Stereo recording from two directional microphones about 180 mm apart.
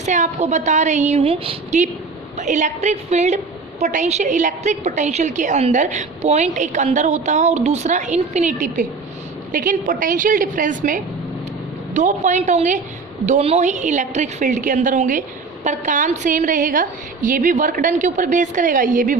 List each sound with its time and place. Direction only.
0.0 s a woman's voice: 40° right (ahead or behind)
11.9 s a woman's voice: 40° right (ahead or behind)